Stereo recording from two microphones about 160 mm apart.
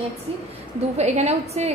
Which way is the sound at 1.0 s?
40° right (ahead or behind).